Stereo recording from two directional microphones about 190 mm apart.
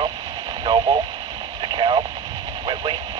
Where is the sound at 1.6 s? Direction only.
25° right (ahead or behind).